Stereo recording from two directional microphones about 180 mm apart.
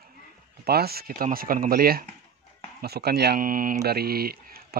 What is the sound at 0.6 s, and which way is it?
Speech, 60° right (ahead or behind).